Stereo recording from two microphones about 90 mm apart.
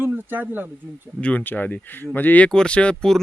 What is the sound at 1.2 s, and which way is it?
Speech, 20° left (ahead or behind).